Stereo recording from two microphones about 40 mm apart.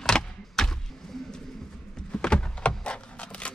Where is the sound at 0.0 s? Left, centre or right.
Centre.